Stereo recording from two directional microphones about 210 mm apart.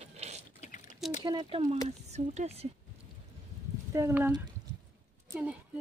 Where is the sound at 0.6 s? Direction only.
35° left (ahead or behind).